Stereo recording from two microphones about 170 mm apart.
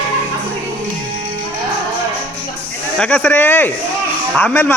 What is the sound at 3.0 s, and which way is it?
A man's voice, 5° left (ahead or behind).